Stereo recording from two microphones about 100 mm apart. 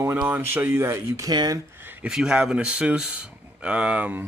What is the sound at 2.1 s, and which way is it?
Speech, 5° right (ahead or behind).